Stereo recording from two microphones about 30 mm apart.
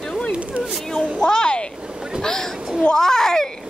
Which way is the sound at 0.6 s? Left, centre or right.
Right.